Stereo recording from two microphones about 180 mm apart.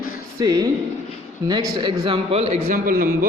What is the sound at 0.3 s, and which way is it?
Speech, 20° right (ahead or behind).